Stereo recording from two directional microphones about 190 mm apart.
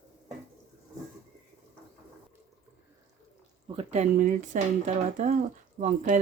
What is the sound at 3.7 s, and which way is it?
Speech, 35° right (ahead or behind).